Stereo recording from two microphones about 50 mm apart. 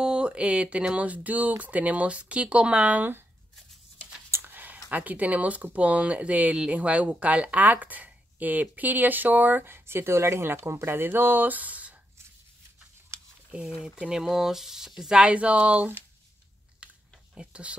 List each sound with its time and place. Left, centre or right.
0.0 s speech: centre
4.5 s a sound: right
4.9 s speech: right
9.8 s speech: right
13.5 s speech: right
15.0 s speech: centre
17.4 s speech: right